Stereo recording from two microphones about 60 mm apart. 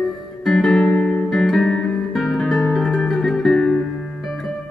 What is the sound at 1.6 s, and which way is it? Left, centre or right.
Music, centre.